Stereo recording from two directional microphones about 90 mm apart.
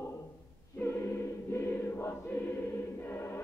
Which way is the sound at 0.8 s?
25° left (ahead or behind).